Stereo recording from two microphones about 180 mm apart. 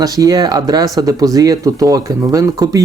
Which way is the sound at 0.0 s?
20° right (ahead or behind).